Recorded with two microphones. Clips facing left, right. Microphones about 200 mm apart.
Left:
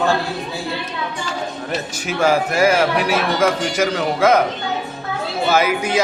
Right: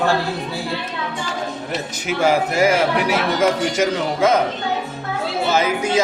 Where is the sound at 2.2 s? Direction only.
20° right (ahead or behind).